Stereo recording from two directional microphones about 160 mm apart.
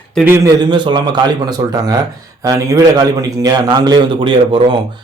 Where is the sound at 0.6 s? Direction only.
30° right (ahead or behind).